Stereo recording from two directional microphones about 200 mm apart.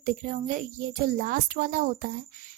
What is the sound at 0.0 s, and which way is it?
A woman's voice, 40° right (ahead or behind).